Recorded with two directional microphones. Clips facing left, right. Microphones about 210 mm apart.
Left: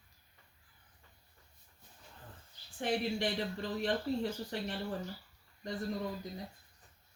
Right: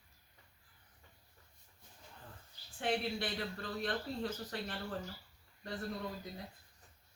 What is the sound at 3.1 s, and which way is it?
Speech, 15° left (ahead or behind).